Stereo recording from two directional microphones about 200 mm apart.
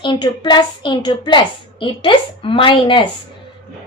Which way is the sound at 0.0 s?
25° left (ahead or behind).